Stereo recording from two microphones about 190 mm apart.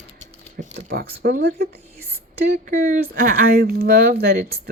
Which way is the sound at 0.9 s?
50° right (ahead or behind).